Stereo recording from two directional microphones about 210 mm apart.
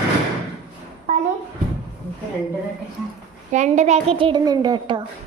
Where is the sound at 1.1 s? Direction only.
35° right (ahead or behind).